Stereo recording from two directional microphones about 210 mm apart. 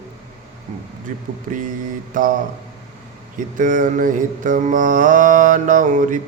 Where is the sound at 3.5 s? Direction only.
40° right (ahead or behind).